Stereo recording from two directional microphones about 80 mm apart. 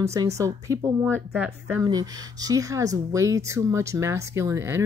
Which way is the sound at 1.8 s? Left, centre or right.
Right.